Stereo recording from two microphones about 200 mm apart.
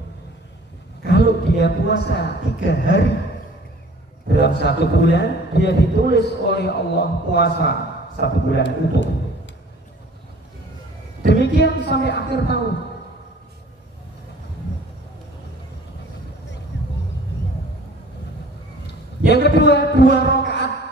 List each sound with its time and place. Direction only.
1.0 s a man's voice: 55° left (ahead or behind)
4.3 s a man's voice: 55° left (ahead or behind)
11.4 s a sound: 55° left (ahead or behind)
12.1 s a man's voice: 55° left (ahead or behind)
16.7 s vehicle: 60° left (ahead or behind)
19.2 s a man's voice: 55° left (ahead or behind)